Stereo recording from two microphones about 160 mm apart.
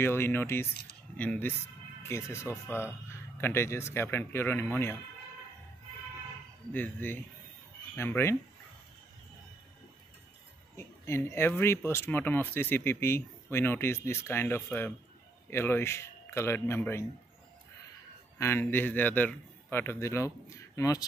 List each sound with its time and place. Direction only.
0.0 s speech: 15° left (ahead or behind)
6.7 s speech: 10° left (ahead or behind)
10.8 s speech: 15° left (ahead or behind)
18.4 s speech: 15° left (ahead or behind)